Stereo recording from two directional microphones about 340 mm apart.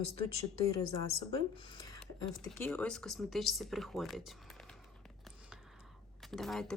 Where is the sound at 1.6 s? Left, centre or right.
Centre.